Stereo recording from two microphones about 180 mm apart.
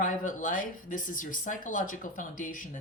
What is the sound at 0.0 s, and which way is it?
Speech, 45° left (ahead or behind).